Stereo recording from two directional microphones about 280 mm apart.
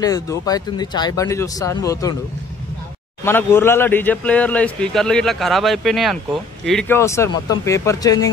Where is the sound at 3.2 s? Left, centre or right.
Centre.